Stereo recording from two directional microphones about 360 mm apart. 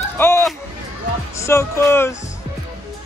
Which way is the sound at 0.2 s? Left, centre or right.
Centre.